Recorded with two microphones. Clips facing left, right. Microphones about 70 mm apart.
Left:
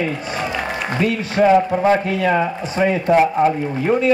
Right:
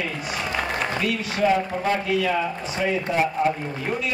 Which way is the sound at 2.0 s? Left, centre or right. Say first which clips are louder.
Left 5 dB; left.